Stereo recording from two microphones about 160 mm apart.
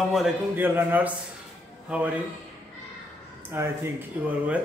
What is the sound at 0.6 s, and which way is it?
A man's voice, 10° right (ahead or behind).